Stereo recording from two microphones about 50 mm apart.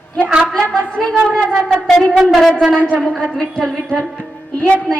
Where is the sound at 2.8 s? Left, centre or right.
Left.